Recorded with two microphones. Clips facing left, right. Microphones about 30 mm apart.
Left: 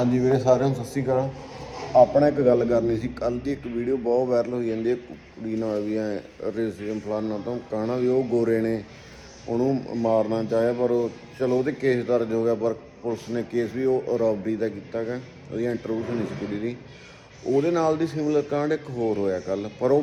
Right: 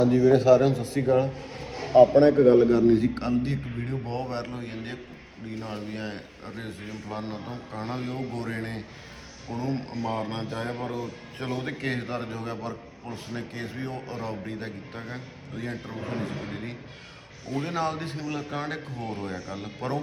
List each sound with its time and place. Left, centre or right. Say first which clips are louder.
0.2 s a man's voice: right 2 dB; right
6.1 s a man's voice: left 11 dB; right
8.3 s a man's voice: left 11 dB; right
11.0 s speech: left 9 dB; right
11.7 s a man's voice: left 9 dB; right
16.4 s speech: left 6 dB; centre
17.7 s a man's voice: left 7 dB; right
18.6 s speech: left 9 dB; right
19.2 s a man's voice: left 9 dB; right